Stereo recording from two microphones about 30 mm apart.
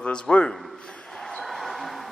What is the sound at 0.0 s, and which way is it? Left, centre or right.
Speech, left.